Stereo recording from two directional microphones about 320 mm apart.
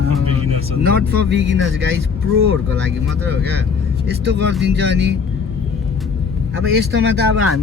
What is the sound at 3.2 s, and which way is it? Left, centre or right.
Speech, right.